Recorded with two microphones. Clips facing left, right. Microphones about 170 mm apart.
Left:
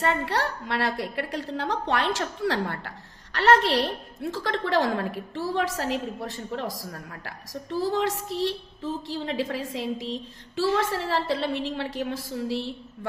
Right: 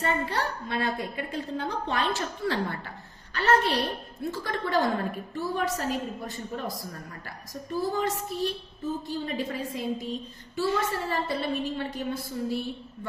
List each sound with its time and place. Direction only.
0.0 s a woman's voice: 75° left (ahead or behind); by 12.7 s 90° left